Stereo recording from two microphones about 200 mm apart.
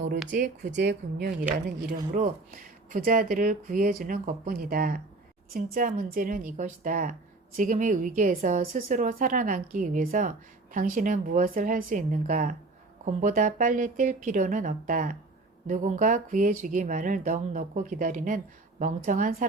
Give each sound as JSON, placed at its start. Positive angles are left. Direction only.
{"t": 0.6, "sound": "speech", "side_deg": -60}
{"t": 2.1, "sound": "a woman's voice", "side_deg": -40}